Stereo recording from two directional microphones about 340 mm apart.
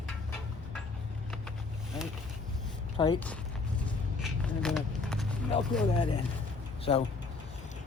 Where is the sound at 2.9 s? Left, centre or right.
Centre.